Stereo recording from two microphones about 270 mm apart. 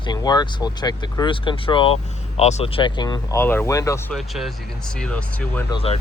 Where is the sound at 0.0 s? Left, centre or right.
Centre.